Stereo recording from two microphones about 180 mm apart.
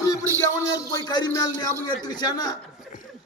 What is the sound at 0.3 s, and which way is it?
A man's voice, 20° left (ahead or behind).